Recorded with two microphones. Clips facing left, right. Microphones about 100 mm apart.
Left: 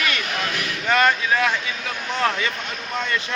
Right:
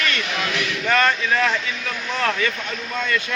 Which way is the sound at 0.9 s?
15° left (ahead or behind).